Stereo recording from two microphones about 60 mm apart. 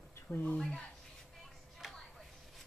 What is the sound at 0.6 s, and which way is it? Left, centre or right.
Speech, centre.